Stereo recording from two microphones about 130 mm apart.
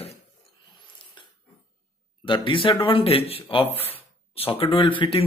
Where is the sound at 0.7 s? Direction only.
35° left (ahead or behind).